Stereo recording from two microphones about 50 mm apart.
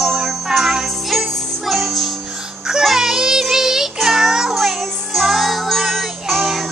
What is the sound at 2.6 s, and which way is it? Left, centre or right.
Music, centre.